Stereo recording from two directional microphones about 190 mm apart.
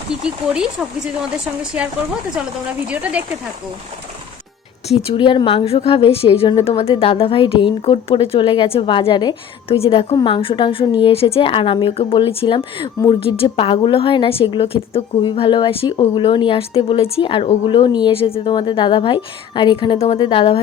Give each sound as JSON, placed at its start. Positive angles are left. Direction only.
{"t": 0.1, "sound": "speech", "side_deg": -5}
{"t": 2.3, "sound": "a woman's voice", "side_deg": -5}
{"t": 4.9, "sound": "a woman's voice", "side_deg": 30}